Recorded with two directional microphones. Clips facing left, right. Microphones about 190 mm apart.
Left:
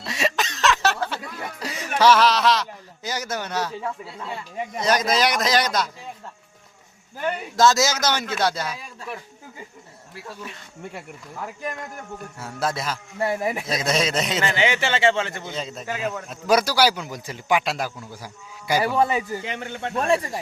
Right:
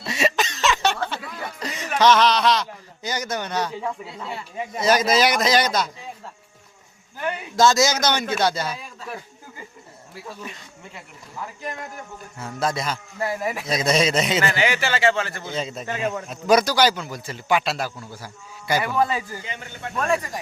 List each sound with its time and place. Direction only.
0.0 s a sound: centre (ahead or behind)
4.8 s a man's voice: 5° right (ahead or behind)
7.5 s a man's voice: centre (ahead or behind)
12.4 s a man's voice: 5° left (ahead or behind)
13.1 s a man's voice: 25° left (ahead or behind)
13.7 s a man's voice: centre (ahead or behind)
14.4 s a man's voice: 20° left (ahead or behind)
15.4 s a man's voice: centre (ahead or behind); by 19.4 s 20° left (ahead or behind)
19.5 s a man's voice: 75° left (ahead or behind)
20.0 s a man's voice: 30° left (ahead or behind)